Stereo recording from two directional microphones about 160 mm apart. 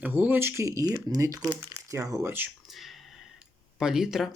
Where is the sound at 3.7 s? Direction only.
5° right (ahead or behind).